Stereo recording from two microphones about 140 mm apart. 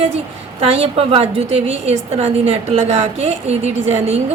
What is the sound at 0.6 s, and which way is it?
A woman's voice, 45° right (ahead or behind).